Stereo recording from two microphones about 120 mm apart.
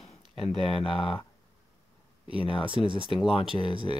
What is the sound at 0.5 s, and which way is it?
Speech, 50° left (ahead or behind).